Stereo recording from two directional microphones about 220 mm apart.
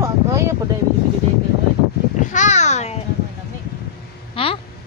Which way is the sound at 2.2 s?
35° left (ahead or behind).